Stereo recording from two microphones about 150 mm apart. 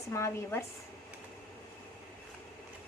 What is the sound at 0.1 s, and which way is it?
Speech, 15° left (ahead or behind).